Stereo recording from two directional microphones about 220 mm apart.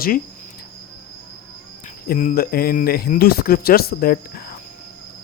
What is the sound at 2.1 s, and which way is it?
Speech, 40° left (ahead or behind).